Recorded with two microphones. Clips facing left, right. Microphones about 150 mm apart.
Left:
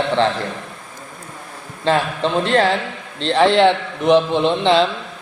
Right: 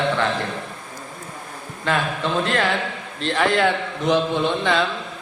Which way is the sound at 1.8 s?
25° left (ahead or behind).